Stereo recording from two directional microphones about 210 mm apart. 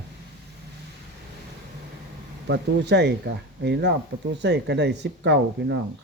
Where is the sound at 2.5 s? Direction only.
55° right (ahead or behind).